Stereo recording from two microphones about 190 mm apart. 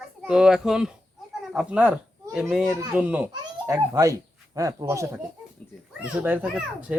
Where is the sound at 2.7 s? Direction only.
15° right (ahead or behind).